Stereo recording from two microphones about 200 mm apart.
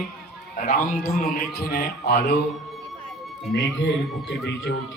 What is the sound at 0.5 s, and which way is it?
A man's voice, 45° left (ahead or behind).